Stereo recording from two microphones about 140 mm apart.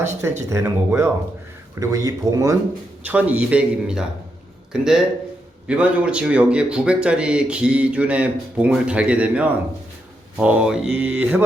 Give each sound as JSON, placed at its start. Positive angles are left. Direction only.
{"t": 0.2, "sound": "speech", "side_deg": -20}
{"t": 3.0, "sound": "a man's voice", "side_deg": -10}